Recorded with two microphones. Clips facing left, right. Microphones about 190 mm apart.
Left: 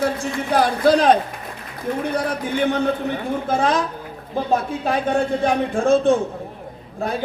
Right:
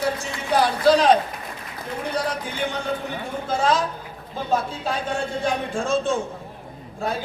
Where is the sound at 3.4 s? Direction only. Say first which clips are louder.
Even; 55° left (ahead or behind).